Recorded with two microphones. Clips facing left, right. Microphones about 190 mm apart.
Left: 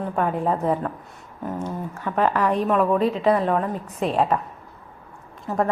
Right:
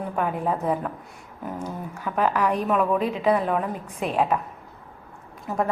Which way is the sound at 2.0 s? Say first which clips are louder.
Left 2 dB; 5° right (ahead or behind).